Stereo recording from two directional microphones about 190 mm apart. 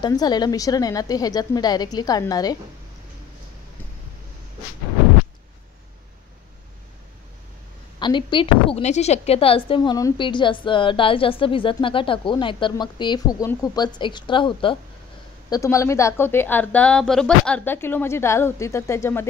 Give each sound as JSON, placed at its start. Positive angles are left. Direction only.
{"t": 0.0, "sound": "speech", "side_deg": 20}
{"t": 8.0, "sound": "speech", "side_deg": 25}
{"t": 15.5, "sound": "a woman's voice", "side_deg": 15}